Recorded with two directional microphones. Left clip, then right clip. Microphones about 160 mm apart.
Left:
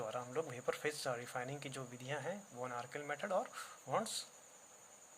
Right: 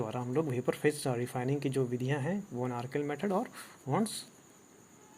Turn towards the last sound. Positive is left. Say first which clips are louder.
# right 5 dB
turn(degrees=-15)  # may be behind; listen again after turning